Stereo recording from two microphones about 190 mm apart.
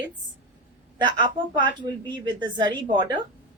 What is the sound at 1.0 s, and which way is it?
A woman's voice, 25° right (ahead or behind).